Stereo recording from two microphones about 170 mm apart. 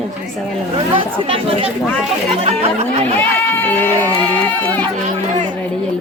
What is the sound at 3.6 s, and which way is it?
Speech, 10° left (ahead or behind).